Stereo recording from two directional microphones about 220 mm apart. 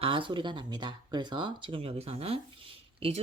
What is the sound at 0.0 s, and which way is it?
Speech, 20° right (ahead or behind).